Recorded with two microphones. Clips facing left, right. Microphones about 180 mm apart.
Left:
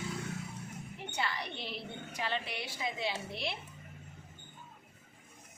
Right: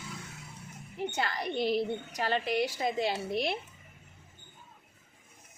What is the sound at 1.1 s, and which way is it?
A woman's voice, 45° right (ahead or behind).